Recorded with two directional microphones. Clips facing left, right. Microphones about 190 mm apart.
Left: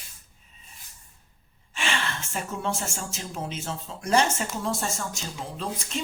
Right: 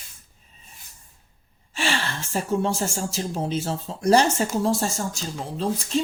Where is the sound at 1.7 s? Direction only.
35° right (ahead or behind).